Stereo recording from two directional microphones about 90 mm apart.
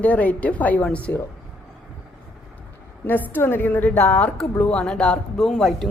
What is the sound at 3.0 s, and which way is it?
A woman's voice, 20° left (ahead or behind).